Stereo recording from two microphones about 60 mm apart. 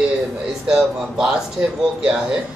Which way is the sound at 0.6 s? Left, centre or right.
Centre.